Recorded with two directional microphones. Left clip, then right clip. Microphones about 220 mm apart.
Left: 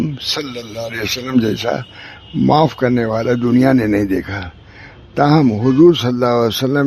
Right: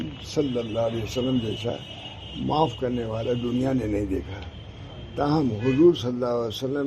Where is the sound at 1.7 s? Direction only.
65° left (ahead or behind).